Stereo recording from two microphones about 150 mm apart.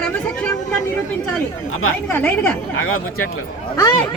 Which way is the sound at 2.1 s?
15° left (ahead or behind).